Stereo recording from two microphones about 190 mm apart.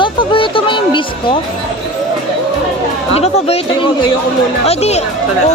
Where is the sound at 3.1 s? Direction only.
35° left (ahead or behind).